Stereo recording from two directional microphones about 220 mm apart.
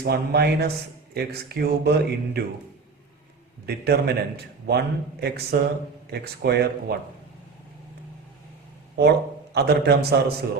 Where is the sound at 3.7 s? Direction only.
45° right (ahead or behind).